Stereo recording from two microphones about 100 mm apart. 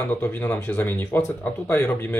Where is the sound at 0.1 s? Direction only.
15° left (ahead or behind).